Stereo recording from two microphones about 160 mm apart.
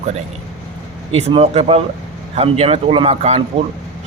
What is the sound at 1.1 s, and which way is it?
Speech, 40° right (ahead or behind).